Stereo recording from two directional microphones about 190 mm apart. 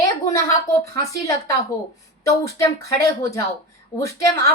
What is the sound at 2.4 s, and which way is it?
Speech, 15° left (ahead or behind).